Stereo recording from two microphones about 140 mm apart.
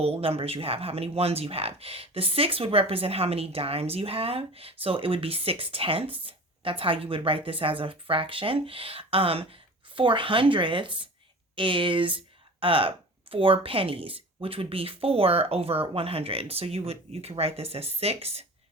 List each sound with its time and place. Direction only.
0.0 s speech: 45° right (ahead or behind)